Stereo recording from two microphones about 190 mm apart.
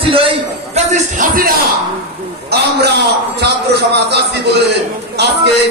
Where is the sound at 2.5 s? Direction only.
60° right (ahead or behind).